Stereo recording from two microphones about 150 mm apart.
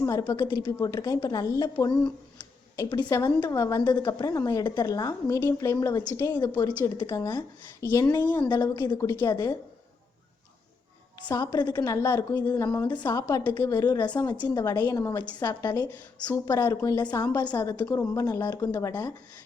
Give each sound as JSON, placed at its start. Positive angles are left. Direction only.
{"t": 0.0, "sound": "a woman's voice", "side_deg": 25}
{"t": 2.7, "sound": "a woman's voice", "side_deg": 25}
{"t": 6.6, "sound": "a woman's voice", "side_deg": 30}
{"t": 11.3, "sound": "a woman's voice", "side_deg": 30}
{"t": 12.9, "sound": "a woman's voice", "side_deg": 30}